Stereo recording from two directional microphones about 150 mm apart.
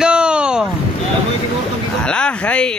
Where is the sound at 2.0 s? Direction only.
5° left (ahead or behind).